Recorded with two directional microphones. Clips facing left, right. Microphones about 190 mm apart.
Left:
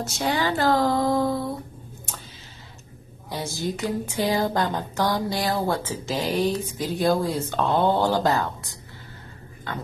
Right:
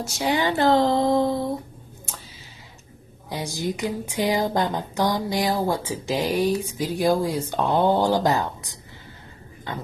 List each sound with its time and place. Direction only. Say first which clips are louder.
0.0 s speech: right 1 dB; 15° right (ahead or behind)
3.3 s a woman's voice: right 1 dB; 15° right (ahead or behind)